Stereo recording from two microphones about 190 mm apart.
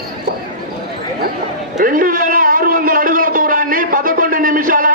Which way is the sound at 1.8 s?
45° right (ahead or behind).